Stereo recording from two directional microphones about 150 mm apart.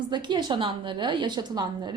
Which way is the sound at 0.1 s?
30° right (ahead or behind).